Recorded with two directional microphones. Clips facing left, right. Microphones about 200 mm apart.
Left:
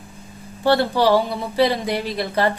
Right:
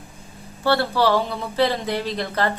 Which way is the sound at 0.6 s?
15° left (ahead or behind).